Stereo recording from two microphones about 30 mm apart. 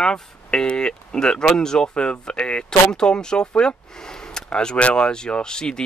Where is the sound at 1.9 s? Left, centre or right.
Left.